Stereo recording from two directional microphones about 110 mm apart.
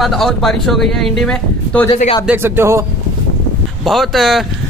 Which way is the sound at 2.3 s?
20° right (ahead or behind).